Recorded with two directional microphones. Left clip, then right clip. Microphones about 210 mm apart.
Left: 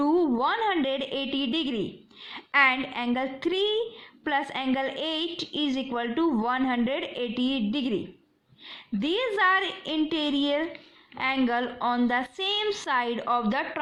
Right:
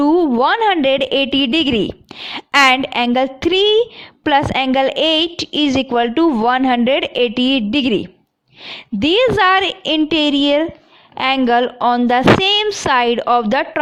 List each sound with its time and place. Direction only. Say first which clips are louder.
0.0 s a woman's voice: right 11 dB; 45° right (ahead or behind)